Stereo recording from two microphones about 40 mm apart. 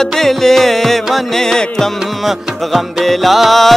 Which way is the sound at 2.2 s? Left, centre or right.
Centre.